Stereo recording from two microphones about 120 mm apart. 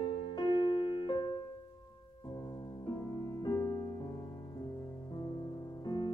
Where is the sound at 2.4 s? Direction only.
25° left (ahead or behind).